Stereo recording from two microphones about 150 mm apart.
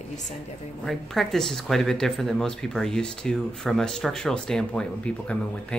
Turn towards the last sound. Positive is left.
turn(degrees=5)  # may be behind; listen again after turning